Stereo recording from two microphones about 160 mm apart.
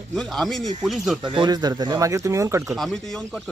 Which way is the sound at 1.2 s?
30° right (ahead or behind).